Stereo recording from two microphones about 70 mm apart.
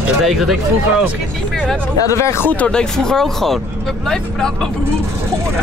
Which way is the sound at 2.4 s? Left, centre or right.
Centre.